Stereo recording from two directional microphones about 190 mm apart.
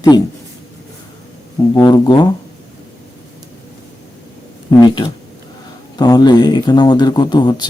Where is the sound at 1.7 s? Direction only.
20° left (ahead or behind).